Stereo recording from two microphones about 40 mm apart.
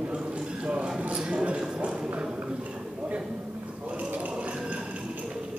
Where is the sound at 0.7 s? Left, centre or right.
Right.